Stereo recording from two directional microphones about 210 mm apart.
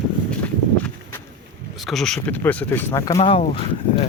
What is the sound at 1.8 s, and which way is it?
Speech, centre (ahead or behind).